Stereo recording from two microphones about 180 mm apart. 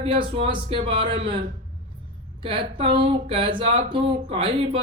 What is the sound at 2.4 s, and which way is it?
Speech, 30° right (ahead or behind).